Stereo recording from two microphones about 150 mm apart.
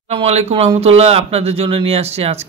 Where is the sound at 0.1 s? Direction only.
45° right (ahead or behind).